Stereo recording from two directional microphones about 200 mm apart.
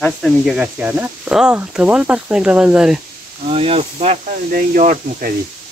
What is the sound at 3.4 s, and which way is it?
Speech, 30° right (ahead or behind).